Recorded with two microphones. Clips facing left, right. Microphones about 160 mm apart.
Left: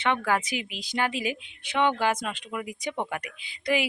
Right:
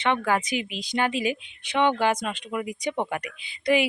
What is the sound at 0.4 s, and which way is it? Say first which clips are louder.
Speech: right 4 dB; 10° left (ahead or behind).